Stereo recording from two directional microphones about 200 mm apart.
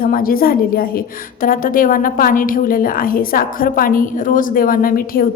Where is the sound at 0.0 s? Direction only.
45° left (ahead or behind).